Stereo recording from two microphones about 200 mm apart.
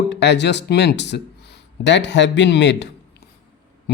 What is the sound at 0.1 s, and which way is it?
Speech, 60° left (ahead or behind).